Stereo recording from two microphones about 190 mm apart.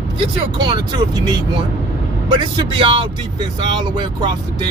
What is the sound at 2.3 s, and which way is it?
Speech, 25° right (ahead or behind).